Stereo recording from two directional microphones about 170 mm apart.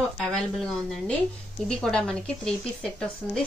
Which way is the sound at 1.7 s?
5° left (ahead or behind).